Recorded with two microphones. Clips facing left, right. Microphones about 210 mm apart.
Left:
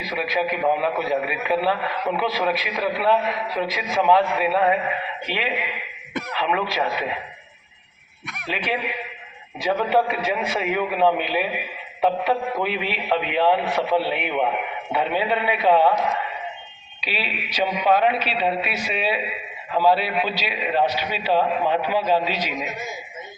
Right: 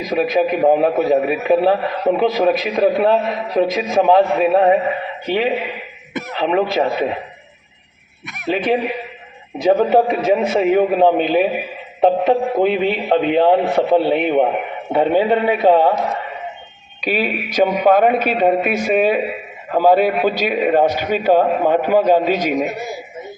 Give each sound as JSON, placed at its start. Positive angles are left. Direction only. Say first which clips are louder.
{"t": 0.0, "sound": "a man's voice", "louder": "right 8 dB", "side_deg": -45}
{"t": 8.4, "sound": "a man's voice", "louder": "right 9 dB", "side_deg": -45}
{"t": 17.0, "sound": "a man's voice", "louder": "right 10 dB", "side_deg": -50}